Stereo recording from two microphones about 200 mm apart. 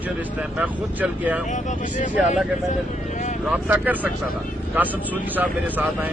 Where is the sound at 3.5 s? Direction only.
5° right (ahead or behind).